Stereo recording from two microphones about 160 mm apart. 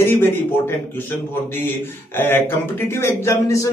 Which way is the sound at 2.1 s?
15° left (ahead or behind).